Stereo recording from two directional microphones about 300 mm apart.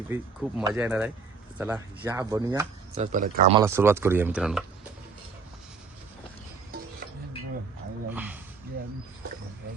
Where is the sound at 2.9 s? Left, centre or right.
Right.